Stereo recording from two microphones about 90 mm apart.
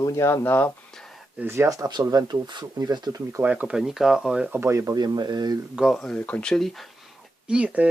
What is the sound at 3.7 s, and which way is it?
Speech, 5° right (ahead or behind).